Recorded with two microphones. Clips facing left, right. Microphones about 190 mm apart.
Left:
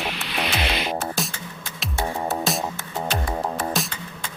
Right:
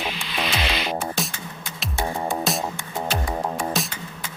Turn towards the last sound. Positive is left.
turn(degrees=0)  # may be behind; listen again after turning